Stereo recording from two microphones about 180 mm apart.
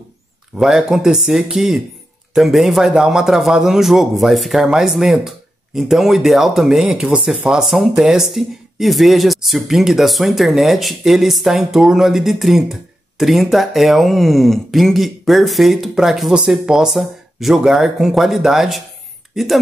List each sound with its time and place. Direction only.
0.6 s speech: centre (ahead or behind)